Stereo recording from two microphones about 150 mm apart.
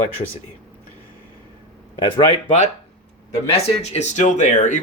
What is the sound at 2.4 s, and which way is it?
Speech, 50° left (ahead or behind).